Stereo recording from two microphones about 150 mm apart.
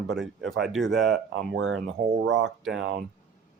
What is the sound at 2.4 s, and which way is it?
Speech, centre (ahead or behind).